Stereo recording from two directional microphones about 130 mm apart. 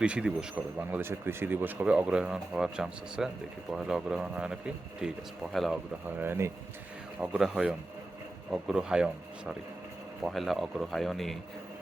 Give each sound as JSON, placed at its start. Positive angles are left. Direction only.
{"t": 0.0, "sound": "speech", "side_deg": -10}
{"t": 6.1, "sound": "speech", "side_deg": -15}
{"t": 7.2, "sound": "speech", "side_deg": -5}